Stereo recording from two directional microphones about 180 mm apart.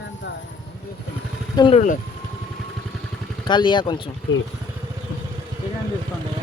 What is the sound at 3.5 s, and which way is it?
Speech, 25° left (ahead or behind).